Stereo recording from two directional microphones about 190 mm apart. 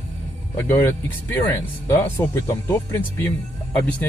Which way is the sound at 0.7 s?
10° left (ahead or behind).